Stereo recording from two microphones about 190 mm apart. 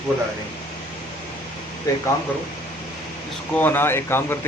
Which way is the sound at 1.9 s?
15° left (ahead or behind).